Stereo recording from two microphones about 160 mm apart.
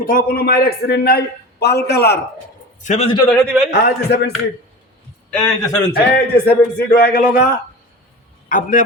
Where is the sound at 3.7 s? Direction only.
90° left.